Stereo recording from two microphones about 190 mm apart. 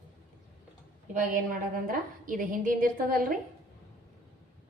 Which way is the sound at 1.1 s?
45° right (ahead or behind).